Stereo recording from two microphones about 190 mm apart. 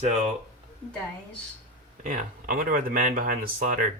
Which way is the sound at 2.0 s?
45° right (ahead or behind).